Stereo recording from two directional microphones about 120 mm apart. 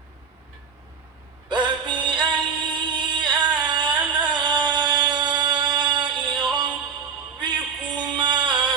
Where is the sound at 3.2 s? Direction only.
40° right (ahead or behind).